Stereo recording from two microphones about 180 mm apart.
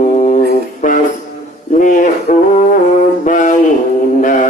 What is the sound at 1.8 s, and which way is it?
Music, 45° left (ahead or behind).